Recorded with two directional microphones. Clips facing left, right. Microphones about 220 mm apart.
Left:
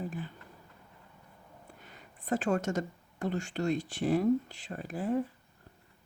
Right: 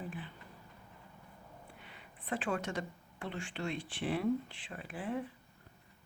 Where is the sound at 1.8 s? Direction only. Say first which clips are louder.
Left 2 dB; 45° left (ahead or behind).